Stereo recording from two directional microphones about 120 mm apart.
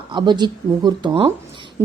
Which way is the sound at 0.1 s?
40° right (ahead or behind).